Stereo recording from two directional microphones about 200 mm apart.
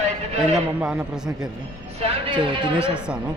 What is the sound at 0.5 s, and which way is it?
Speech, 5° right (ahead or behind).